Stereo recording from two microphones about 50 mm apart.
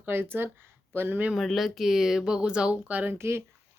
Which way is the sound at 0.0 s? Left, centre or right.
Right.